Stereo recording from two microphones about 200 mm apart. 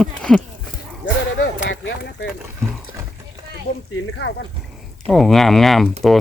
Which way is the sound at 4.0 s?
65° left (ahead or behind).